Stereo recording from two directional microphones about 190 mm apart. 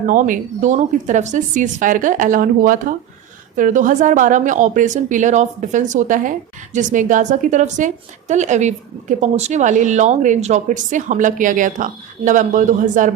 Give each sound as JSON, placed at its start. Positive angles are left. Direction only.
{"t": 0.0, "sound": "a woman's voice", "side_deg": -45}